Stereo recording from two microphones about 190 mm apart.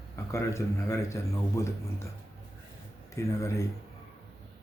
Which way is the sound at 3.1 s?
15° left (ahead or behind).